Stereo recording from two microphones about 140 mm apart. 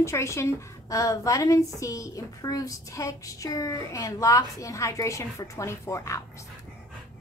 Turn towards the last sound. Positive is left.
turn(degrees=20)  # may be behind; listen again after turning